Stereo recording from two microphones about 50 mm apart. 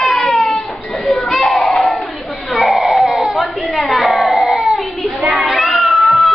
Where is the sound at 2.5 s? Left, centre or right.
Centre.